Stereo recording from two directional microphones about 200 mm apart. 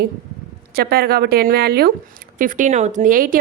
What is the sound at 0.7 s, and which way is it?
Speech, 50° right (ahead or behind).